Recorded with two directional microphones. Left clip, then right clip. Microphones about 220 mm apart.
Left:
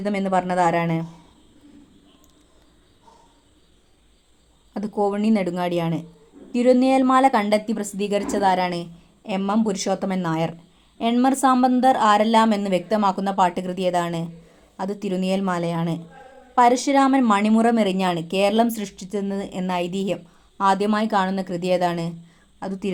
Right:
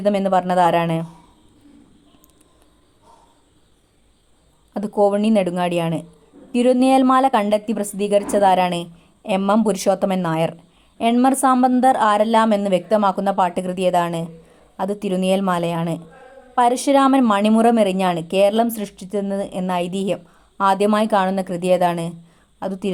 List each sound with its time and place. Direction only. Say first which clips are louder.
0.0 s a woman's voice: right 5 dB; 20° right (ahead or behind)
4.7 s a woman's voice: right 6 dB; 15° right (ahead or behind)